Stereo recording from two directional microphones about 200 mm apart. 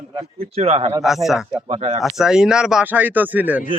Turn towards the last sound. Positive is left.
turn(degrees=-10)  # may be behind; listen again after turning